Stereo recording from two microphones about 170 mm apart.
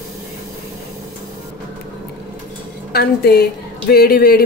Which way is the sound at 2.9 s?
65° left (ahead or behind).